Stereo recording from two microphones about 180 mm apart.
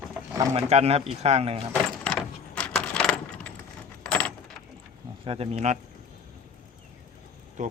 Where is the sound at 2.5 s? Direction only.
5° left (ahead or behind).